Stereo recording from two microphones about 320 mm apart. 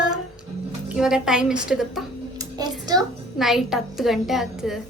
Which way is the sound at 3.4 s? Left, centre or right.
Centre.